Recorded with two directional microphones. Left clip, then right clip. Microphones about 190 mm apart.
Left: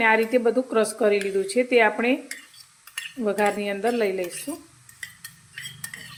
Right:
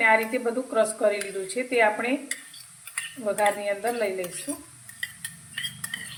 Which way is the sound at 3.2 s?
60° left (ahead or behind).